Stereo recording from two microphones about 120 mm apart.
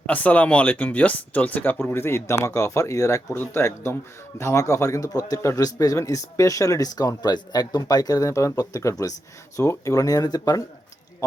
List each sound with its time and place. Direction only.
0.0 s speech: 15° left (ahead or behind); by 11.4 s 30° left (ahead or behind)